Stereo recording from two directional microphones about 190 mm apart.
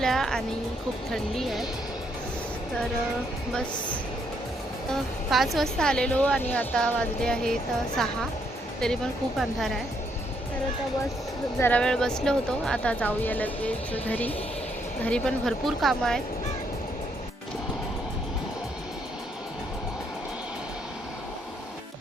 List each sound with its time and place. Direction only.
0.0 s music: centre (ahead or behind)
1.1 s a woman's voice: centre (ahead or behind)
5.3 s a woman's voice: centre (ahead or behind)
9.4 s a woman's voice: centre (ahead or behind)
11.6 s a woman's voice: 5° left (ahead or behind)